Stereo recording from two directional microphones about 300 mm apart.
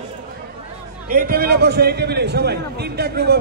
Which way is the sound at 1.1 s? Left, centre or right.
Right.